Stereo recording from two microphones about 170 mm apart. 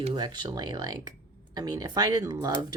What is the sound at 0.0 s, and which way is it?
Speech, 30° right (ahead or behind).